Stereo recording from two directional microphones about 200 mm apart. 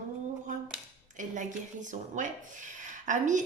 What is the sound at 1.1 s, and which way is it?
A woman's voice, 40° right (ahead or behind).